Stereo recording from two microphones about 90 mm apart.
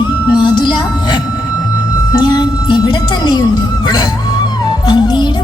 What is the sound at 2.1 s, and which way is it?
Music, 50° left (ahead or behind).